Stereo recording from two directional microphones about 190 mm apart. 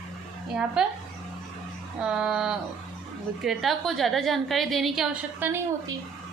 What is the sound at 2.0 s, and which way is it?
A woman's voice, 5° right (ahead or behind).